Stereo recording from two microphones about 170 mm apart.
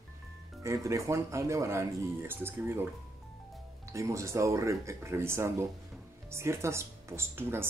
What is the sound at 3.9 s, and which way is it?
Speech, 15° right (ahead or behind).